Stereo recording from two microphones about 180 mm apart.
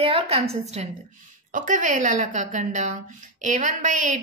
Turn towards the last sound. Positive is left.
turn(degrees=-45)  # may be behind; listen again after turning